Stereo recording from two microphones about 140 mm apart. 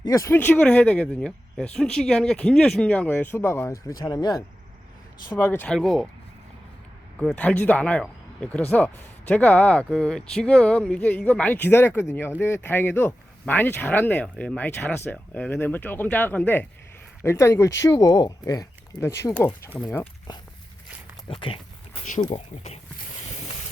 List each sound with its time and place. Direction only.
0.0 s speech: 25° left (ahead or behind)
5.4 s speech: 15° left (ahead or behind)
7.2 s speech: 5° left (ahead or behind)
21.2 s speech: 40° left (ahead or behind)
22.0 s speech: 65° left (ahead or behind)